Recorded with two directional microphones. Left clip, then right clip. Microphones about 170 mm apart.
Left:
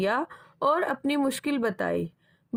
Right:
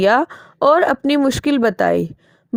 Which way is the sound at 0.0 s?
50° right (ahead or behind).